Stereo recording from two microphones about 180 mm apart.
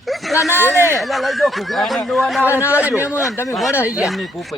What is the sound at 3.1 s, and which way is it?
Speech, 15° left (ahead or behind).